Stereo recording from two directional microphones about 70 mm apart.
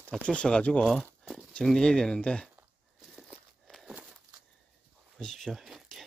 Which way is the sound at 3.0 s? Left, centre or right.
Centre.